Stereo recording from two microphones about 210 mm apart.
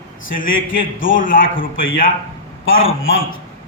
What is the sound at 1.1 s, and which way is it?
Speech, 40° left (ahead or behind).